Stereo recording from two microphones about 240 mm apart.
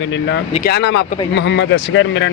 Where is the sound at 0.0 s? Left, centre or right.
Left.